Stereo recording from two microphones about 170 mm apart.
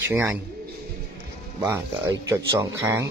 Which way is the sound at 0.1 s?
10° right (ahead or behind).